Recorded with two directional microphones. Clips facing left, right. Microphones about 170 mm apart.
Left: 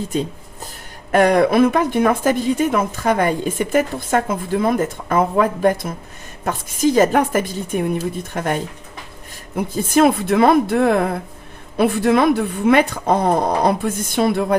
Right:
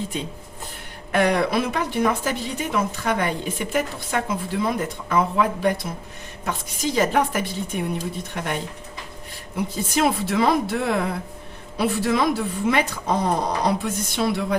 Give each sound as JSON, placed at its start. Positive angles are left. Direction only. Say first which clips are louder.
{"t": 0.1, "sound": "a woman's voice", "louder": "left 8 dB", "side_deg": 40}
{"t": 9.6, "sound": "speech", "louder": "left 7 dB", "side_deg": 55}